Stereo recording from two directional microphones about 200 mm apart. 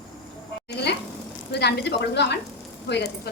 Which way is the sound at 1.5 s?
55° left (ahead or behind).